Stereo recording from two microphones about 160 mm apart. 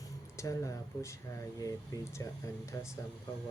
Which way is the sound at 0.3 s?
20° left (ahead or behind).